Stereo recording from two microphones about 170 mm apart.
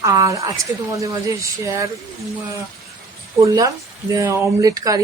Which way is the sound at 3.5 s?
20° right (ahead or behind).